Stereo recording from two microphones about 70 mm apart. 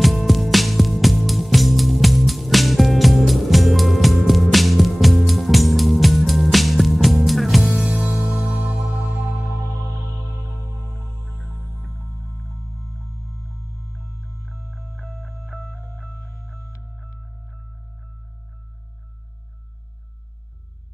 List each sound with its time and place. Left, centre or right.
0.0 s music: centre
8.8 s music: centre
11.0 s music: centre
12.0 s music: left
12.5 s music: left
15.5 s music: centre
16.1 s music: left
16.8 s music: centre